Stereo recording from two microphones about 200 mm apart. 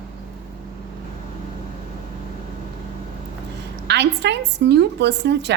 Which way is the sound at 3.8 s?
60° right (ahead or behind).